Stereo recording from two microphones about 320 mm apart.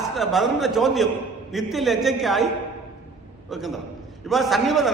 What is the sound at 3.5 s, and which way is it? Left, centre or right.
A man's voice, centre.